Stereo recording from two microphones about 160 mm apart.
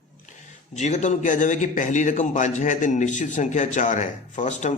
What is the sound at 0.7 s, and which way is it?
A man's voice, 45° left (ahead or behind).